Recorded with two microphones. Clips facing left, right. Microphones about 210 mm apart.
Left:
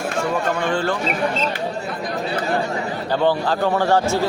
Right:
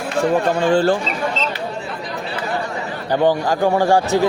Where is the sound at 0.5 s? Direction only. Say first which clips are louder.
Right 6 dB; 30° right (ahead or behind).